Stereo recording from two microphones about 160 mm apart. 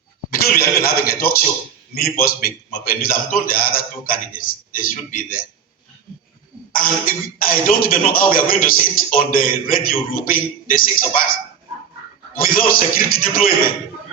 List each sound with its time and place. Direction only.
0.3 s a man's voice: 70° left (ahead or behind)
6.7 s a man's voice: 60° left (ahead or behind)
12.3 s a man's voice: 60° left (ahead or behind)